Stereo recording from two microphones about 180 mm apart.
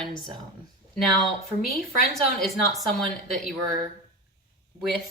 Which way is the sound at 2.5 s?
Centre (ahead or behind).